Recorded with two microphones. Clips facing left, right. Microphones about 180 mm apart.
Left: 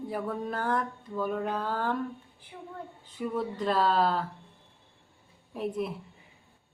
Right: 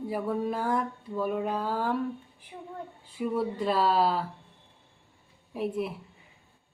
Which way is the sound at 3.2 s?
5° right (ahead or behind).